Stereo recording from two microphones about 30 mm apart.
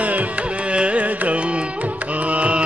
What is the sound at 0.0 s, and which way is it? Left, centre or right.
Carnatic music, right.